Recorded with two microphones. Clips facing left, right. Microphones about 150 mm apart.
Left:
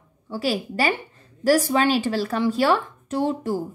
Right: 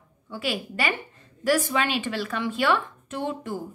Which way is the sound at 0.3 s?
35° left (ahead or behind).